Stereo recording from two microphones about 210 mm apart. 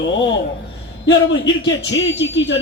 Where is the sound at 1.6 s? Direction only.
60° left (ahead or behind).